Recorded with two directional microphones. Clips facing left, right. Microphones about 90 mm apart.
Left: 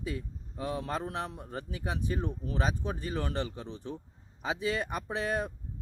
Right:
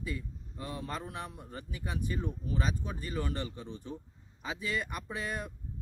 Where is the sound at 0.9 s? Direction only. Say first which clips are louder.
Left 5 dB; 35° left (ahead or behind).